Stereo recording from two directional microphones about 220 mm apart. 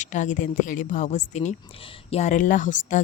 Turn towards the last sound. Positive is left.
turn(degrees=35)  # may be behind; listen again after turning